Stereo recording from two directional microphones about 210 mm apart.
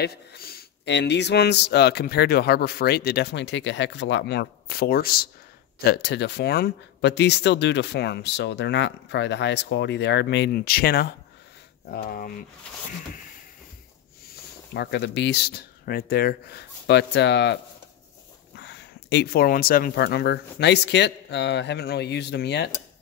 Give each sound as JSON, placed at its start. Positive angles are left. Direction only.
{"t": 0.0, "sound": "speech", "side_deg": 50}
{"t": 14.7, "sound": "speech", "side_deg": 55}
{"t": 18.6, "sound": "speech", "side_deg": 55}